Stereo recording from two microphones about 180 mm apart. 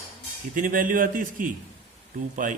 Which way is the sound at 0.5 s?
50° right (ahead or behind).